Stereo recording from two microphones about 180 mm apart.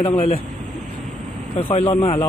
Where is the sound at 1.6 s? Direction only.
30° left (ahead or behind).